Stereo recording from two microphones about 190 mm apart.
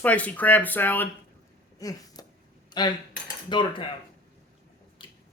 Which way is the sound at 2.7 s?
25° left (ahead or behind).